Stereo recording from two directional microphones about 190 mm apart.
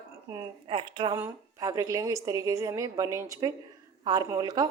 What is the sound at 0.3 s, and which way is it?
A woman's voice, 20° right (ahead or behind).